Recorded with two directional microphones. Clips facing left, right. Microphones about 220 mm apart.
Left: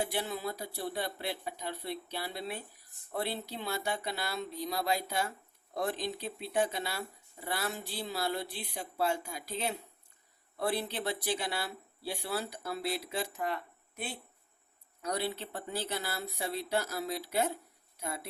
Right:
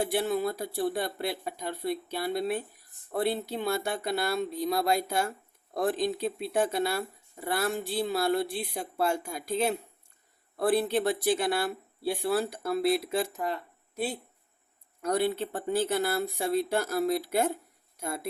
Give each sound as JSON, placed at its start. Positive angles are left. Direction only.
{"t": 0.1, "sound": "speech", "side_deg": -50}
{"t": 15.0, "sound": "speech", "side_deg": -50}